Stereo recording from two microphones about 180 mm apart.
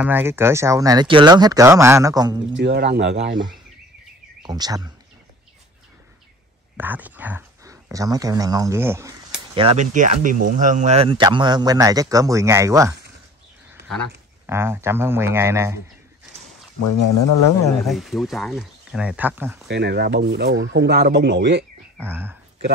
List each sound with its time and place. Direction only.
0.0 s speech: 10° right (ahead or behind)
2.5 s speech: 70° right (ahead or behind)
4.5 s speech: 20° right (ahead or behind)
6.8 s speech: 10° right (ahead or behind)
9.6 s speech: 30° right (ahead or behind)
9.9 s speech: 45° right (ahead or behind); by 12.9 s 15° right (ahead or behind)
14.4 s speech: 15° right (ahead or behind)
17.8 s speech: centre (ahead or behind)
19.7 s speech: 70° right (ahead or behind)
22.0 s speech: 10° right (ahead or behind)